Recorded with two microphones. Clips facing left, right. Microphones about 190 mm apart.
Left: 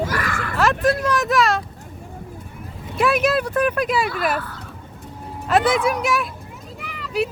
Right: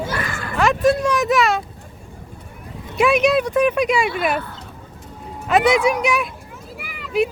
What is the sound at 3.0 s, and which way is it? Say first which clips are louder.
Speech: right 3 dB; centre (ahead or behind).